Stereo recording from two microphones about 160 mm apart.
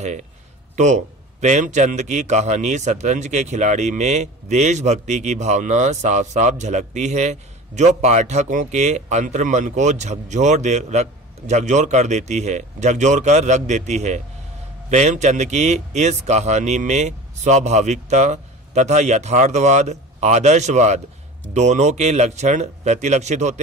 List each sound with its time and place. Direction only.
0.0 s a man's voice: 50° right (ahead or behind)